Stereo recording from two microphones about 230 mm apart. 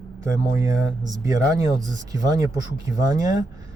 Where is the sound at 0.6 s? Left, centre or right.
Centre.